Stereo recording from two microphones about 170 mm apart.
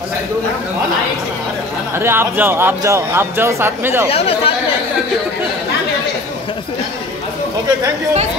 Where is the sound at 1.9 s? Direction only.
15° right (ahead or behind).